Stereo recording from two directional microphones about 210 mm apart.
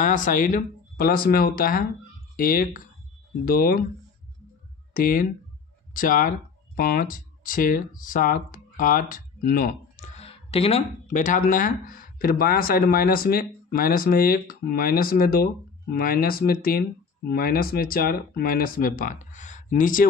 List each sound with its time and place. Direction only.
0.0 s speech: 40° left (ahead or behind)
4.9 s speech: 40° left (ahead or behind)
10.1 s speech: 30° left (ahead or behind)